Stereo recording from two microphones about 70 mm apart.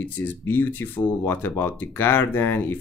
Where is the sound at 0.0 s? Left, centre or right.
Left.